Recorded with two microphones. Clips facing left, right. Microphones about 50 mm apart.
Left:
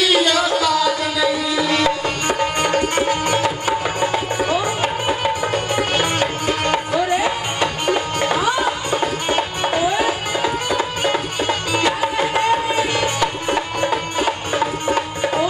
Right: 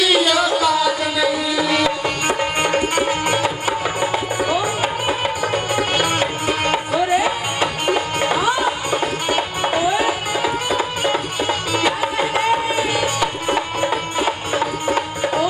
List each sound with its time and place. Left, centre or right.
0.0 s music: centre